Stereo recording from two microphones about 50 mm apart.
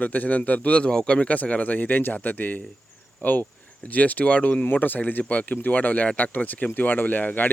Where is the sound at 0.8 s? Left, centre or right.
Centre.